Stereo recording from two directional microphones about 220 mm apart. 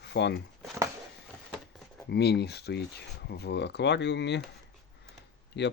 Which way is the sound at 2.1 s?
50° left (ahead or behind).